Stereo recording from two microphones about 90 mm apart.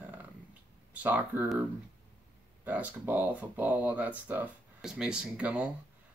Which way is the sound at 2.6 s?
15° right (ahead or behind).